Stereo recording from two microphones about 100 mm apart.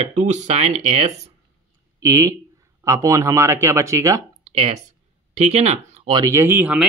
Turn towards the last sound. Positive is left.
turn(degrees=-20)  # may be behind; listen again after turning